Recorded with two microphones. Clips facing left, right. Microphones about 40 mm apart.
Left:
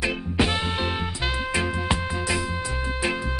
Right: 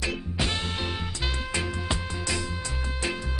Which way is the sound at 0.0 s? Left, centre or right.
Centre.